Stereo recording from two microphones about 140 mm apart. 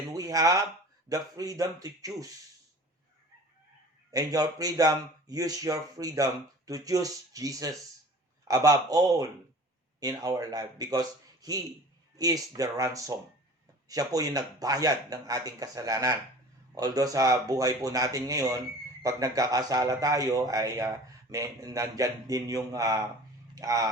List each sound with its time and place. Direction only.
0.1 s a sound: 25° right (ahead or behind)
1.1 s a man's voice: 25° right (ahead or behind)
4.1 s a man's voice: 25° right (ahead or behind)
12.1 s a man's voice: 25° right (ahead or behind)